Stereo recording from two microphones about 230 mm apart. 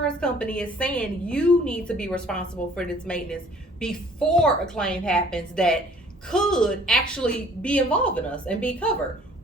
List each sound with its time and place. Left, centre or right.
0.0 s a woman's voice: centre
4.4 s a woman's voice: centre